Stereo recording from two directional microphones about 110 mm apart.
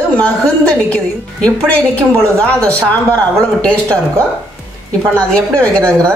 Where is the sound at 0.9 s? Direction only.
10° left (ahead or behind).